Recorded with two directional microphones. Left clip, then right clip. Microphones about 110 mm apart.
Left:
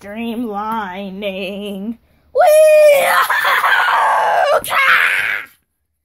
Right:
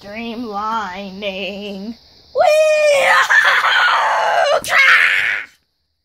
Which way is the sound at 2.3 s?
85° left.